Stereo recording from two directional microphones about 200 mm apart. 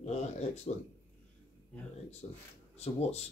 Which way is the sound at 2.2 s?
30° left (ahead or behind).